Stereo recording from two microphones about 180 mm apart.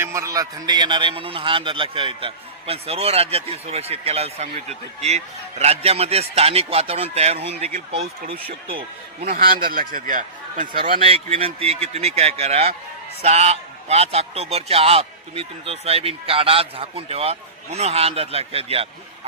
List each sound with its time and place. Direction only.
0.0 s a man's voice: 15° right (ahead or behind)
9.3 s a man's voice: 55° right (ahead or behind)
11.0 s a man's voice: 35° right (ahead or behind)